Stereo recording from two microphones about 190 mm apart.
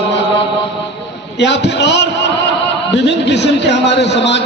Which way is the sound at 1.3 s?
65° left (ahead or behind).